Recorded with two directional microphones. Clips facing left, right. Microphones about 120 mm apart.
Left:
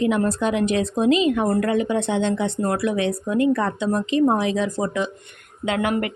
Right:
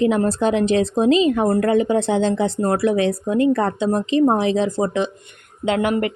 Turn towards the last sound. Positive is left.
turn(degrees=-30)  # may be behind; listen again after turning